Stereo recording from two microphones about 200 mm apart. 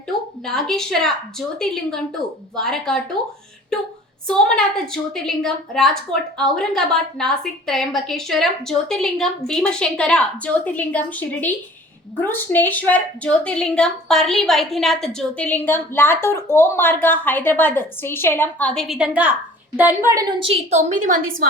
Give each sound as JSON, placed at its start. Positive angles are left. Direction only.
{"t": 0.4, "sound": "a woman's voice", "side_deg": 0}